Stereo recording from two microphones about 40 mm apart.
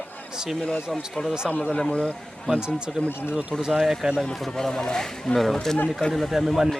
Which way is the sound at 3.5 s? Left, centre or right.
Centre.